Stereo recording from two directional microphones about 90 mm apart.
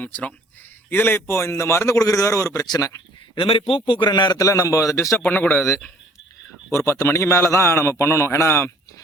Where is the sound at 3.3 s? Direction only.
85° left; by 4.1 s 70° left (ahead or behind).